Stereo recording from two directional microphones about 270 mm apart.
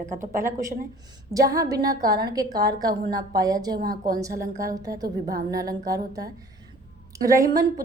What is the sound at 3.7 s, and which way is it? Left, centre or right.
Speech, right.